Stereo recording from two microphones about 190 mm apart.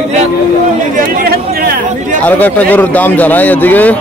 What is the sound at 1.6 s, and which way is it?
Chatter, 50° right (ahead or behind).